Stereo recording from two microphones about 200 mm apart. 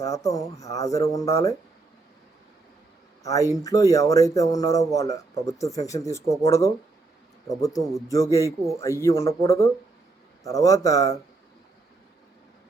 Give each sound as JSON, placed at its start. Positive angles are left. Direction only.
{"t": 0.0, "sound": "speech", "side_deg": 15}
{"t": 3.2, "sound": "speech", "side_deg": 15}